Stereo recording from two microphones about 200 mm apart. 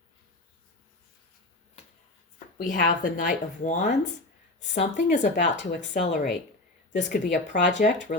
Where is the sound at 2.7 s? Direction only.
45° left (ahead or behind).